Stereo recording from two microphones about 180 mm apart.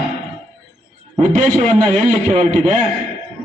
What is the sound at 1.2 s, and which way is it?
A man's voice, 45° right (ahead or behind).